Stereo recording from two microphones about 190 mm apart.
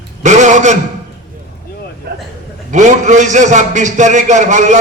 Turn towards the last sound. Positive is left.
turn(degrees=-40)  # may be behind; listen again after turning